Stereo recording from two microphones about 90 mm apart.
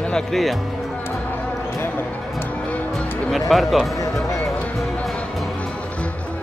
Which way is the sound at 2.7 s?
15° left (ahead or behind).